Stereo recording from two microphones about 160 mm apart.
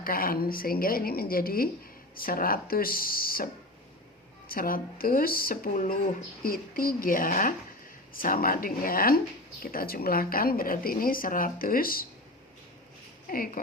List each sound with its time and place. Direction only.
0.0 s speech: 65° left (ahead or behind)
13.2 s speech: 60° left (ahead or behind)